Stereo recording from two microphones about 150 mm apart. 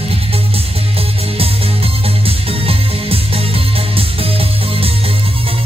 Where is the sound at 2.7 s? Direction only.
40° right (ahead or behind).